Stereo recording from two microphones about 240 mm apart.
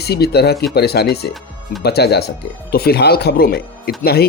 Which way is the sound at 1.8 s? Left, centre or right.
Left.